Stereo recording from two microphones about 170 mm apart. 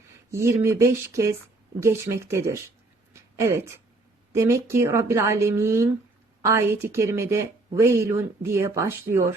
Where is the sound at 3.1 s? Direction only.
15° right (ahead or behind).